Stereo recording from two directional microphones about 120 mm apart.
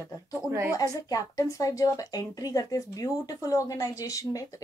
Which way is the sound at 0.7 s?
30° left (ahead or behind).